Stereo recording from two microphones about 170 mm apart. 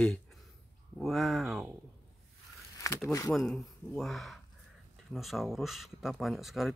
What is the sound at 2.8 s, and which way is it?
Speech, 20° left (ahead or behind).